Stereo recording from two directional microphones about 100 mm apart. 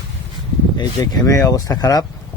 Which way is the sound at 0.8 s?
40° left (ahead or behind).